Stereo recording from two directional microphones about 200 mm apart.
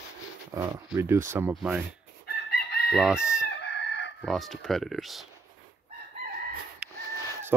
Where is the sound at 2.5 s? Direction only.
50° left (ahead or behind).